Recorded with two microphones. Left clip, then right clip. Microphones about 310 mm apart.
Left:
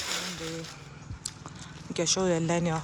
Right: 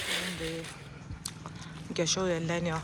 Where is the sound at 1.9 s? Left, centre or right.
Centre.